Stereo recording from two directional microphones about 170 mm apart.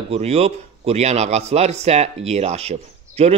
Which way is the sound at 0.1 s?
35° right (ahead or behind).